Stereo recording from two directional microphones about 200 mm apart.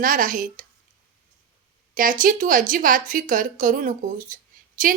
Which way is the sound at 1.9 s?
45° right (ahead or behind).